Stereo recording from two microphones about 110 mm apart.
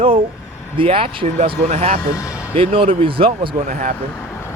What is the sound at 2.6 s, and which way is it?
Speech, 55° right (ahead or behind).